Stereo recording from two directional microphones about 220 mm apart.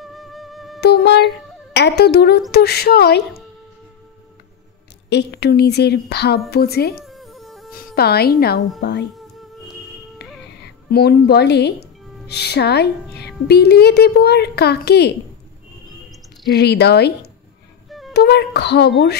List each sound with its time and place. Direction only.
0.0 s music: centre (ahead or behind)
0.7 s a woman's voice: 50° left (ahead or behind)
5.1 s a woman's voice: 50° left (ahead or behind)
7.1 s music: centre (ahead or behind)
7.7 s a woman's voice: 45° left (ahead or behind)
10.9 s a woman's voice: 45° left (ahead or behind)
16.4 s a woman's voice: 50° left (ahead or behind)
17.8 s music: centre (ahead or behind)
18.1 s a woman's voice: 50° left (ahead or behind)